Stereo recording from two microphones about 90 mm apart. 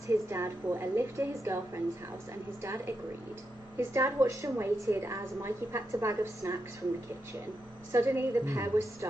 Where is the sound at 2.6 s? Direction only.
30° right (ahead or behind).